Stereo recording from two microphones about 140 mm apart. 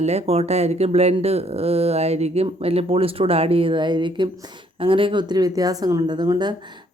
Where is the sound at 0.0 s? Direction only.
50° right (ahead or behind).